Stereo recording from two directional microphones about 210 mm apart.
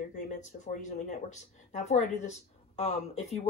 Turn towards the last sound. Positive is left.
turn(degrees=30)  # may be behind; listen again after turning